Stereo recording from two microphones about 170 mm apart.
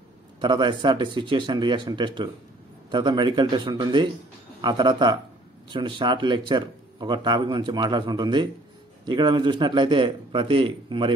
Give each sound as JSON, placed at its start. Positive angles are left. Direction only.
{"t": 0.4, "sound": "speech", "side_deg": -25}